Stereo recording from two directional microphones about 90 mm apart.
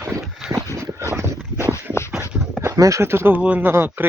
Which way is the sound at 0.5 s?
35° right (ahead or behind).